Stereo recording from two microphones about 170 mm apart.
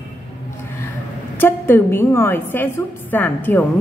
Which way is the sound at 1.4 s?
15° left (ahead or behind).